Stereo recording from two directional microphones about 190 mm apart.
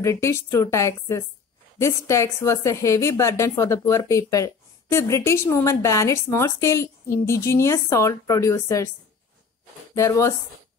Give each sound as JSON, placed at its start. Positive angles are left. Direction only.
{"t": 0.0, "sound": "a woman's voice", "side_deg": 15}
{"t": 9.9, "sound": "a woman's voice", "side_deg": 15}